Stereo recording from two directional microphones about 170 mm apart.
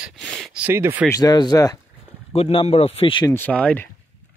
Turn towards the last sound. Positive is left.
turn(degrees=5)  # may be behind; listen again after turning